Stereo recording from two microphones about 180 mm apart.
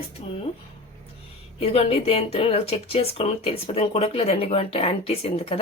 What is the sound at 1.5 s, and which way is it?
Speech, 35° left (ahead or behind).